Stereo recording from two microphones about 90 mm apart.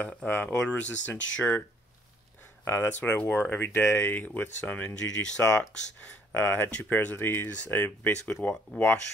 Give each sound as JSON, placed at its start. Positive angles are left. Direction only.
{"t": 0.0, "sound": "speech", "side_deg": 15}
{"t": 2.6, "sound": "speech", "side_deg": 25}
{"t": 6.3, "sound": "speech", "side_deg": 25}